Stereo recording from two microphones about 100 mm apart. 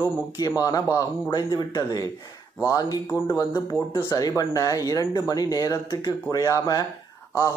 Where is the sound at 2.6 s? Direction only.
35° left (ahead or behind).